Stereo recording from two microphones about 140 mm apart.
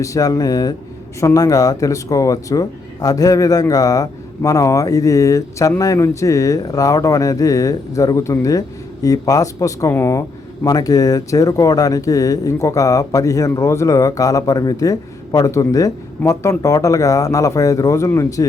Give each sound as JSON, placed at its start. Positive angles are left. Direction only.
{"t": 0.0, "sound": "speech", "side_deg": 25}